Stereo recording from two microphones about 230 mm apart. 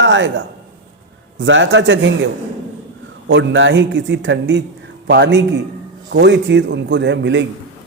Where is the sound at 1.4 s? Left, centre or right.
Right.